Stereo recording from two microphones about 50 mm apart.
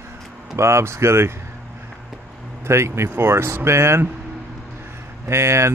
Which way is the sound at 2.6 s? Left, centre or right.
Right.